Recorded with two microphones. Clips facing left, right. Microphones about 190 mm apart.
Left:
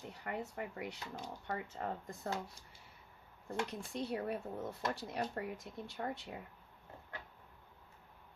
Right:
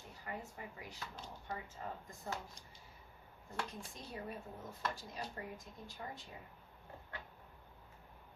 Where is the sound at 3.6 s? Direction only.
70° left (ahead or behind).